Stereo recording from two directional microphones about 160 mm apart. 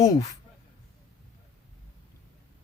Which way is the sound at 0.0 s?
20° left (ahead or behind).